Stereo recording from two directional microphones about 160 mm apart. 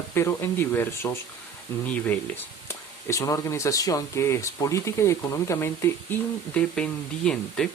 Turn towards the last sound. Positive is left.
turn(degrees=5)  # may be behind; listen again after turning